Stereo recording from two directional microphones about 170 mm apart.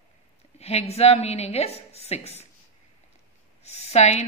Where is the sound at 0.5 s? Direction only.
35° left (ahead or behind).